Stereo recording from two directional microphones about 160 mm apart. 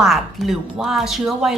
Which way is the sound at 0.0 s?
Centre (ahead or behind).